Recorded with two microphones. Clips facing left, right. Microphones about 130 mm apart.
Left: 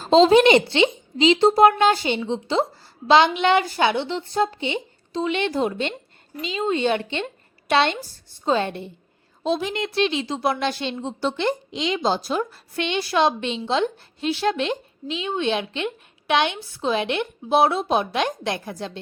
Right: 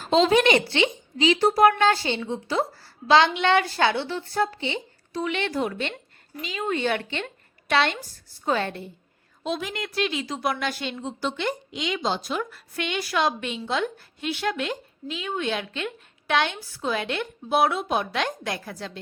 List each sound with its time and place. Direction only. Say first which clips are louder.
0.0 s a woman's voice: left 5 dB; 30° left (ahead or behind)